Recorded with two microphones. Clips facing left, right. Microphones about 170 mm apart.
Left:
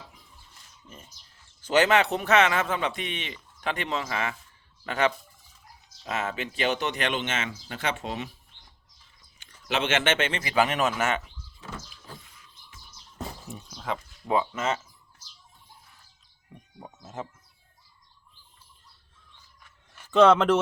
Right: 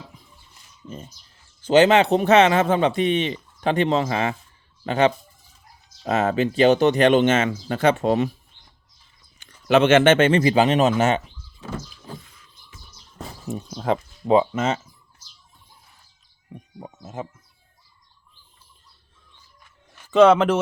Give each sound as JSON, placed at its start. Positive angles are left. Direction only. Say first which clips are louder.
{"t": 0.9, "sound": "a man's voice", "louder": "right 12 dB", "side_deg": -30}
{"t": 9.4, "sound": "speech", "louder": "right 12 dB", "side_deg": -50}
{"t": 10.5, "sound": "a man's voice", "louder": "right 7 dB", "side_deg": -25}
{"t": 13.5, "sound": "speech", "louder": "right 12 dB", "side_deg": -50}
{"t": 14.3, "sound": "a man's voice", "louder": "right 8 dB", "side_deg": -20}
{"t": 17.0, "sound": "speech", "louder": "right 4 dB", "side_deg": -10}
{"t": 20.1, "sound": "speech", "louder": "right 4 dB", "side_deg": -5}